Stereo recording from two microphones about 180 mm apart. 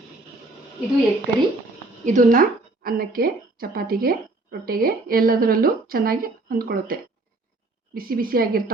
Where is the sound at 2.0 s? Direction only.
45° right (ahead or behind).